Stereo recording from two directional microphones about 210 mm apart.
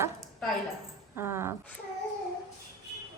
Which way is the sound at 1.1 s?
10° right (ahead or behind).